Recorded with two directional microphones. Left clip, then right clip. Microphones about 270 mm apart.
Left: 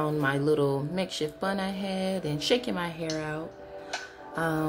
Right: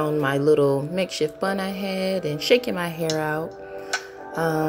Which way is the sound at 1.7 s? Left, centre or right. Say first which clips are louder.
Right 5 dB; centre.